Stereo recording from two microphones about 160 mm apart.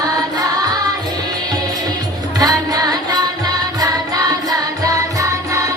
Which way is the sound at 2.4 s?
25° right (ahead or behind).